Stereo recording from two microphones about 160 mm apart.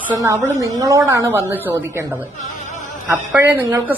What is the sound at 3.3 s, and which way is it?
Speech, 15° right (ahead or behind).